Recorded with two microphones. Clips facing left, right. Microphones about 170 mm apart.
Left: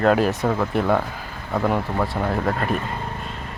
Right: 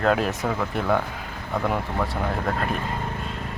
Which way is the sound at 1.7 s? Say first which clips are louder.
Left 3 dB; centre (ahead or behind).